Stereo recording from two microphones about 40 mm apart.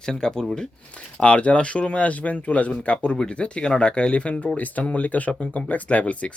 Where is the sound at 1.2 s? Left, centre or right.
Left.